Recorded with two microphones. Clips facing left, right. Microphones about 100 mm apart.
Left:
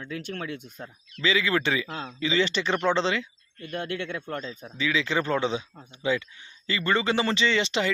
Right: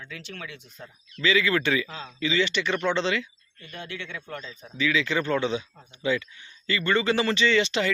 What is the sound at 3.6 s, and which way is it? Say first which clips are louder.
Speech: left 6 dB; 55° left (ahead or behind).